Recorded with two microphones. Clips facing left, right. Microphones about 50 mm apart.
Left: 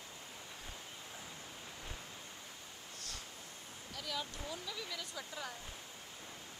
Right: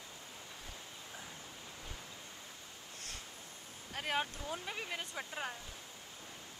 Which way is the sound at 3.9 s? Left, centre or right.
Right.